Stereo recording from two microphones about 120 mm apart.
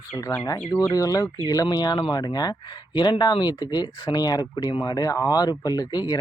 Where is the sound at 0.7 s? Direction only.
25° left (ahead or behind).